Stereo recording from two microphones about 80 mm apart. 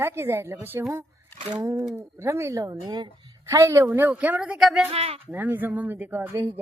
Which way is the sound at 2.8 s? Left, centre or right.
Right.